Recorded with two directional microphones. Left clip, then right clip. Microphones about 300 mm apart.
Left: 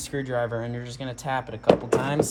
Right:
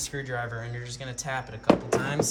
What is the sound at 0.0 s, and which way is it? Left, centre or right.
Speech, centre.